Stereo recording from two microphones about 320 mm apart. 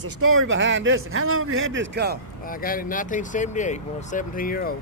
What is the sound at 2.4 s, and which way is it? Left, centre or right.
Speech, left.